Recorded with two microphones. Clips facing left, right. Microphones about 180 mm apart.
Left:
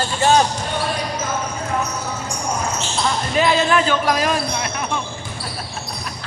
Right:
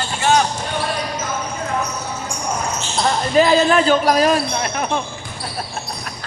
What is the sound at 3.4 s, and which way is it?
Speech, 40° right (ahead or behind).